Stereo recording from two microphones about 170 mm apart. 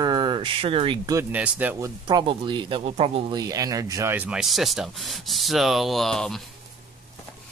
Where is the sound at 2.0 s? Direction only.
30° right (ahead or behind); by 6.4 s 5° left (ahead or behind).